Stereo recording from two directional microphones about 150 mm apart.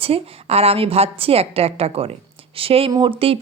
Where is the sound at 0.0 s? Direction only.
40° right (ahead or behind).